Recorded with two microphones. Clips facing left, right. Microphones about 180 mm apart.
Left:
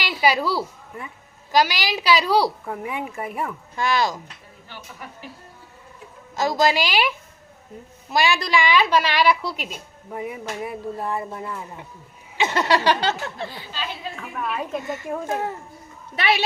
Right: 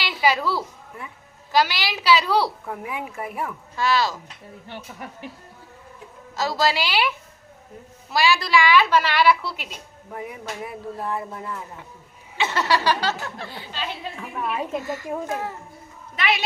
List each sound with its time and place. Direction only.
0.0 s a woman's voice: 15° left (ahead or behind)
2.6 s speech: centre (ahead or behind)
3.8 s a woman's voice: 15° left (ahead or behind)
6.3 s a woman's voice: 15° left (ahead or behind)
8.1 s a woman's voice: 20° left (ahead or behind)
12.4 s speech: 15° left (ahead or behind)
14.2 s a woman's voice: 20° right (ahead or behind)
15.3 s a child's voice: 30° left (ahead or behind)